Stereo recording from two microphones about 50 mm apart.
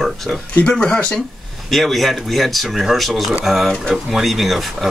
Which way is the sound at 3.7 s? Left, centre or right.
Centre.